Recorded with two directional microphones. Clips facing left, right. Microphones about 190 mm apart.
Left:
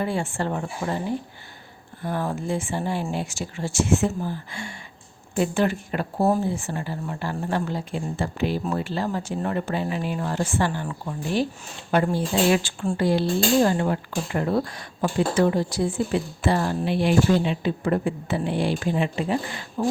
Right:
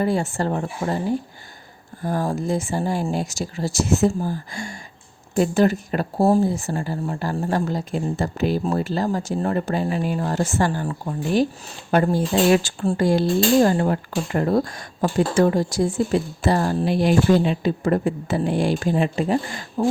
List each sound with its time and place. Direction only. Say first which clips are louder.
0.0 s speech: right 4 dB; 40° right (ahead or behind)
2.0 s speech: right 4 dB; 40° right (ahead or behind)